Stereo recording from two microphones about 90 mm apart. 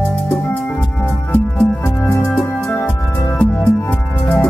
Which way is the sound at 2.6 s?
15° left (ahead or behind).